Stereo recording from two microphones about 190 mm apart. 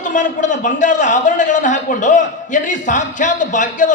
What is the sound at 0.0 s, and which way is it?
A man's voice, 40° left (ahead or behind).